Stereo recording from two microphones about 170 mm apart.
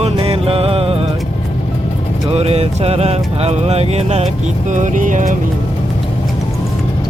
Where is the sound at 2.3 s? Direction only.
35° right (ahead or behind).